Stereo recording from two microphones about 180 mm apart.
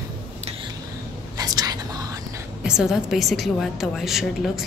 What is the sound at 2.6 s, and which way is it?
A woman's voice, 5° right (ahead or behind).